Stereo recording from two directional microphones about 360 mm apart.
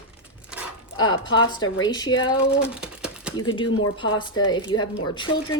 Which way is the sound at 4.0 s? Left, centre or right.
Centre.